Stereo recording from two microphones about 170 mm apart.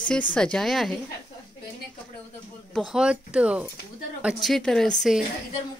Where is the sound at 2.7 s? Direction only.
Centre (ahead or behind).